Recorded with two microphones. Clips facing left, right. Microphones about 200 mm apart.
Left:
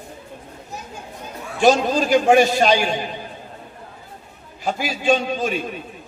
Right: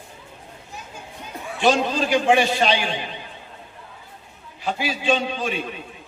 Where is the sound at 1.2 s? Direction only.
45° left (ahead or behind).